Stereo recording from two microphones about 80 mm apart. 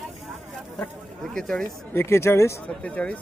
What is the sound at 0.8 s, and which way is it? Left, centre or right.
Speech, centre.